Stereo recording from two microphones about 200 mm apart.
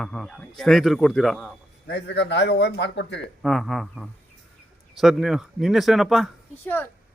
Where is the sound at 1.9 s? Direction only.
60° left (ahead or behind).